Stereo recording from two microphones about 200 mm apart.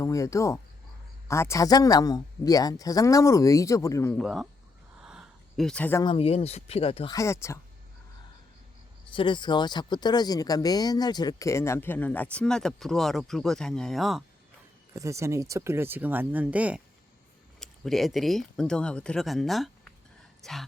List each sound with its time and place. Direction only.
0.0 s speech: 15° left (ahead or behind)
4.2 s speech: centre (ahead or behind)
5.0 s a sound: centre (ahead or behind)
6.0 s speech: 25° left (ahead or behind)
7.2 s speech: 15° left (ahead or behind)
9.1 s speech: 25° left (ahead or behind); by 14.3 s centre (ahead or behind)
14.9 s speech: 15° right (ahead or behind); by 19.9 s centre (ahead or behind)
20.4 s gasp: centre (ahead or behind)